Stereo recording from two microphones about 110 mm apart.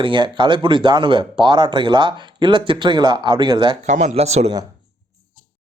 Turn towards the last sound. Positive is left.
turn(degrees=-80)